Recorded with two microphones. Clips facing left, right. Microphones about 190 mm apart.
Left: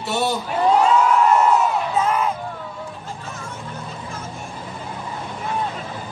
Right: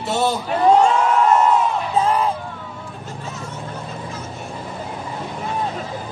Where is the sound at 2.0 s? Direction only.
35° right (ahead or behind).